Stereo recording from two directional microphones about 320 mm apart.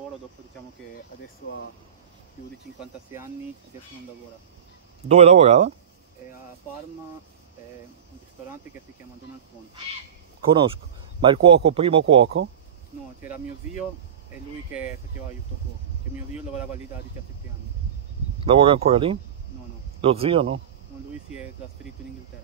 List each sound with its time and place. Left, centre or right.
2.8 s speech: centre
5.0 s speech: centre
11.1 s speech: centre
18.4 s speech: centre